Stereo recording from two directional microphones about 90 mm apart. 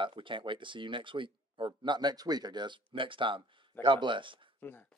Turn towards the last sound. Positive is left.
turn(degrees=25)  # may be behind; listen again after turning